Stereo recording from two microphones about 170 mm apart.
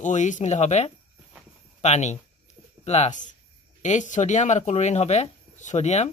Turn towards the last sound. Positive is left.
turn(degrees=40)  # may be behind; listen again after turning